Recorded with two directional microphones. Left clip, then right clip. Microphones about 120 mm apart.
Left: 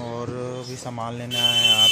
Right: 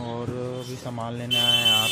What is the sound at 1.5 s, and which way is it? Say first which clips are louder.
Mantra: left 5 dB; 15° left (ahead or behind).